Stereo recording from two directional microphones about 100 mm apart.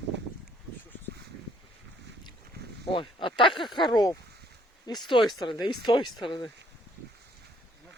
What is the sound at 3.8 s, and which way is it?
Speech, 40° left (ahead or behind).